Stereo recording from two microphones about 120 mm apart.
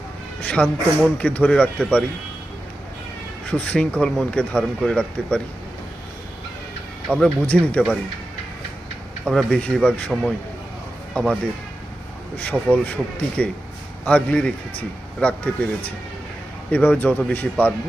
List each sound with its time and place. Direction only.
0.4 s speech: 10° left (ahead or behind)
3.4 s speech: 10° left (ahead or behind)
7.1 s speech: 10° left (ahead or behind)
9.2 s speech: 5° left (ahead or behind)
11.1 s speech: 10° left (ahead or behind)
12.7 s speech: 10° left (ahead or behind)
16.7 s speech: 15° left (ahead or behind)